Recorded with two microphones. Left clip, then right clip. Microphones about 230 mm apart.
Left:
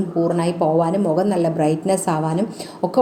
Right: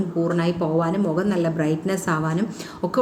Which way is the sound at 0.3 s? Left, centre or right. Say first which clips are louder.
Left 6 dB; centre.